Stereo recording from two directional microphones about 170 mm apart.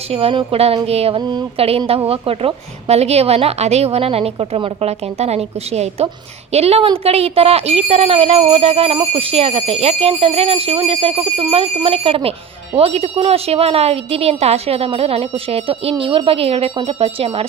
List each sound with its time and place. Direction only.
0.1 s speech: 35° right (ahead or behind)